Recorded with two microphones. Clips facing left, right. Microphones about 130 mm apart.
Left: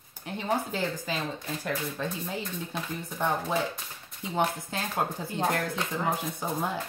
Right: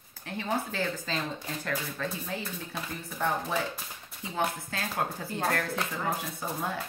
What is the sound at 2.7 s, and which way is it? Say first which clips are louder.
Speech: left 3 dB; 20° left (ahead or behind).